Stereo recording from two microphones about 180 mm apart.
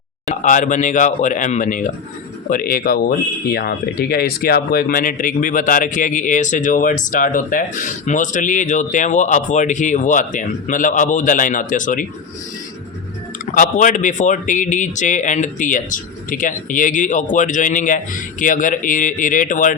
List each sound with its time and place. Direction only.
0.4 s speech: 45° left (ahead or behind)
13.5 s speech: 45° left (ahead or behind)